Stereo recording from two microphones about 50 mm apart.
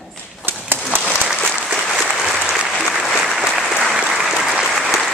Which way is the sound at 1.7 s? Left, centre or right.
Centre.